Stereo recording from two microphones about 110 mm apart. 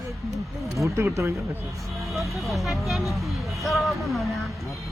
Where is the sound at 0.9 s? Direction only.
25° right (ahead or behind).